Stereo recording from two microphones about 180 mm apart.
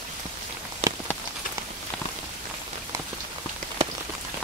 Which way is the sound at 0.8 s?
35° right (ahead or behind).